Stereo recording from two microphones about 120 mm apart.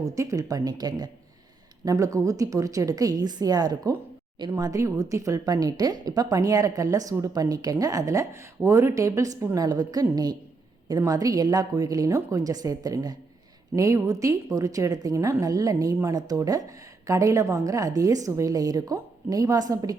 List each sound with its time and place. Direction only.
0.0 s a woman's voice: 25° right (ahead or behind)